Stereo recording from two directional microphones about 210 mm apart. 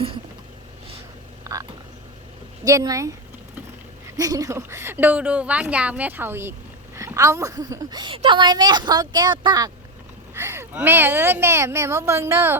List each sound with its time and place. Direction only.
1.5 s frog: 15° right (ahead or behind)
2.6 s a woman's voice: 15° right (ahead or behind)
4.2 s a woman's voice: 15° right (ahead or behind)